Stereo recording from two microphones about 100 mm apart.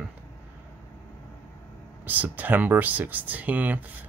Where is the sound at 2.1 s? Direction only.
15° right (ahead or behind).